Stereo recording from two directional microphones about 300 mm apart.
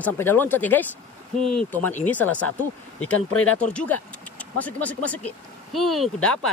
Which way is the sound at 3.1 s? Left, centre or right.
Left.